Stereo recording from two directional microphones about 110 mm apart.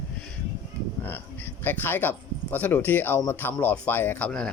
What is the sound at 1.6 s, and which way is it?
Speech, 20° left (ahead or behind).